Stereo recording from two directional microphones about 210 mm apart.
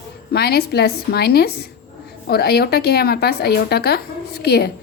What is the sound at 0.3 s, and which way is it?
A woman's voice, 50° left (ahead or behind).